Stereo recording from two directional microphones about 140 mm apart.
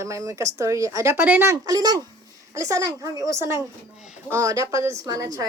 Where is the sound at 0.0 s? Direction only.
20° right (ahead or behind).